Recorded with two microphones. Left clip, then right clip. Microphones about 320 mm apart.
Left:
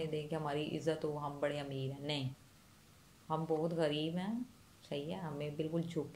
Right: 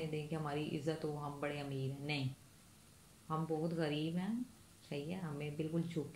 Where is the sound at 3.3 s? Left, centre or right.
Left.